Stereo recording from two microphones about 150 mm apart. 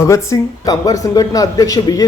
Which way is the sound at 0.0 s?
20° left (ahead or behind).